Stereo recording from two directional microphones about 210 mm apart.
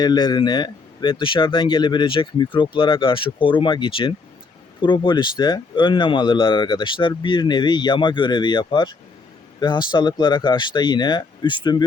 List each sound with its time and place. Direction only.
0.0 s speech: 20° left (ahead or behind)